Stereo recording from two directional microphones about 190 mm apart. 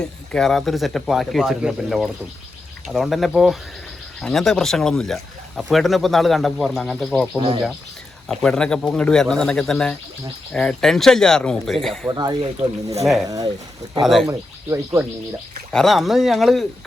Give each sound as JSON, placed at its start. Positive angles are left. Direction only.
{"t": 0.0, "sound": "speech", "side_deg": 5}
{"t": 7.3, "sound": "speech", "side_deg": -25}
{"t": 8.3, "sound": "speech", "side_deg": 5}
{"t": 12.0, "sound": "speech", "side_deg": -20}
{"t": 14.0, "sound": "speech", "side_deg": 0}
{"t": 14.3, "sound": "speech", "side_deg": -15}
{"t": 15.7, "sound": "speech", "side_deg": 0}